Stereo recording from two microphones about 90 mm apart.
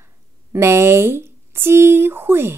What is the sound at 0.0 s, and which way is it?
A woman's voice, 30° right (ahead or behind).